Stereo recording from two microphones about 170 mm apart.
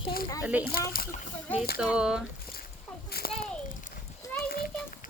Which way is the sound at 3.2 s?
60° left (ahead or behind).